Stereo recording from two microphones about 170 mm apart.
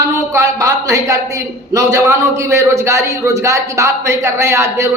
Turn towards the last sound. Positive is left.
turn(degrees=-15)  # may be behind; listen again after turning